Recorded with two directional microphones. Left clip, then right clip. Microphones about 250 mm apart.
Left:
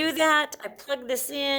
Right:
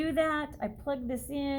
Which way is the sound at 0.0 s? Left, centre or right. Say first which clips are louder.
Left 7 dB; left.